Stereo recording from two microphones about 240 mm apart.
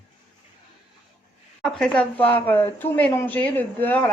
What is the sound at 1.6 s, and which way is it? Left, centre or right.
A woman's voice, centre.